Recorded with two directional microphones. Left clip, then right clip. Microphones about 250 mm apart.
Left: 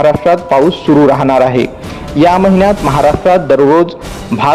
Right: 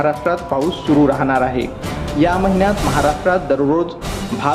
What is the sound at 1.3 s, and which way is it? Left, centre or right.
A man's voice, left.